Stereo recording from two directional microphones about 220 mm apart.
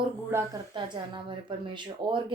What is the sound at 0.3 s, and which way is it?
Speech, 15° right (ahead or behind).